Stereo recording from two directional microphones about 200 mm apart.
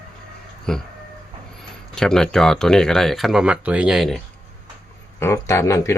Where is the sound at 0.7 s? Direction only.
5° left (ahead or behind).